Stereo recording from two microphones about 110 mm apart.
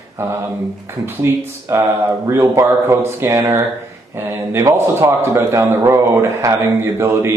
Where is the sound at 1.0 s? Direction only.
20° right (ahead or behind).